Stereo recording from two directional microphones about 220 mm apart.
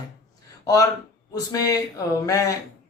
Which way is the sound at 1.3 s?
15° left (ahead or behind).